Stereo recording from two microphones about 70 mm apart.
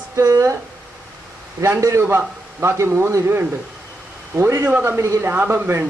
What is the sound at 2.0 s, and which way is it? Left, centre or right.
A man's voice, right.